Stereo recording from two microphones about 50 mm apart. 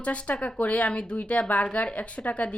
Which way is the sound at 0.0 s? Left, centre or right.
Left.